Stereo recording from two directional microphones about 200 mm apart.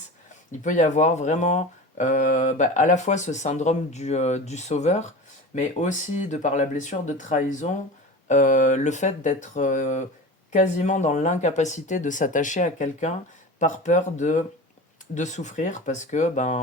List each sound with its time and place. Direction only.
0.6 s speech: 40° left (ahead or behind)